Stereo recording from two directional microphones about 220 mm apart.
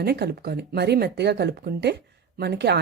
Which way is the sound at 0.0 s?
45° right (ahead or behind).